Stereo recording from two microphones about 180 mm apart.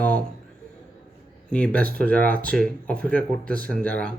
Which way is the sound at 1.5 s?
5° left (ahead or behind).